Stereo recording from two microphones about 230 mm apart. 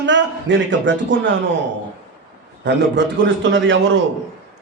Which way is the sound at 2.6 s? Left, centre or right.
Right.